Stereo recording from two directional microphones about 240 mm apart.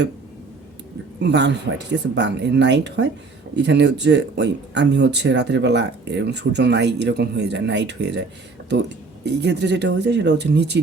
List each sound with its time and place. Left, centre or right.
1.2 s speech: right
9.2 s speech: right